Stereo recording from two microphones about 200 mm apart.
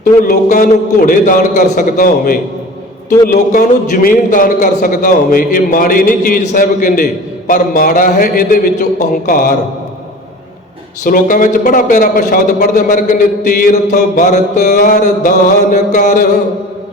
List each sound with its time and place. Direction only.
0.0 s a man's voice: 40° left (ahead or behind)
11.0 s a man's voice: 40° left (ahead or behind)